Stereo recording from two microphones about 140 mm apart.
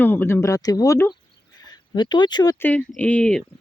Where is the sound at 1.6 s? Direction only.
30° left (ahead or behind).